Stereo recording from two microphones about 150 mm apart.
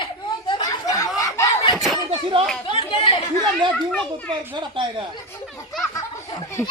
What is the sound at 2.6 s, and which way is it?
Speech, 35° left (ahead or behind).